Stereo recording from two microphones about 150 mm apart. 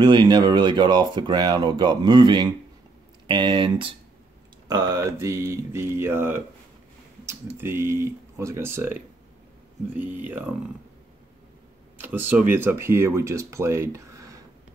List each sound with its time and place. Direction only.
0.0 s speech: 30° right (ahead or behind); by 10.5 s 10° right (ahead or behind)
12.0 s speech: 10° right (ahead or behind)